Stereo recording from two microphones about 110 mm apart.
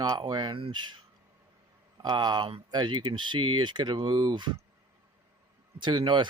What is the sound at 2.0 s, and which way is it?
Speech, 40° right (ahead or behind).